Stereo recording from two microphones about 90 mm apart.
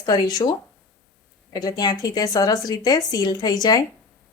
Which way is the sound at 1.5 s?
45° left (ahead or behind).